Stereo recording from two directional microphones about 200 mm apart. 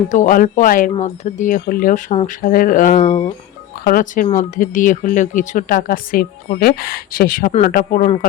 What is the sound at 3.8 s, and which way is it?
Speech, 45° left (ahead or behind).